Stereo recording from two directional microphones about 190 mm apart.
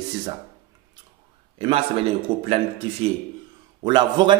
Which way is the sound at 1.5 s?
30° right (ahead or behind).